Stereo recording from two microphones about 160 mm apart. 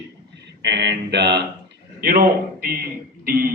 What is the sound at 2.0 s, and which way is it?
A man's voice, 70° right (ahead or behind).